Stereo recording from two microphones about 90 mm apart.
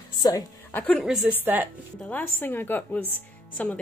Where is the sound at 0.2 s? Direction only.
45° left (ahead or behind).